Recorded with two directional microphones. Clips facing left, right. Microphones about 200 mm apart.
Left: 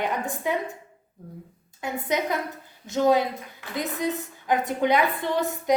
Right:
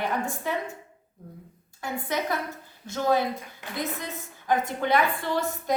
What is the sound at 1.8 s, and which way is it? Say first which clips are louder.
A woman's voice: left 3 dB; 20° left (ahead or behind).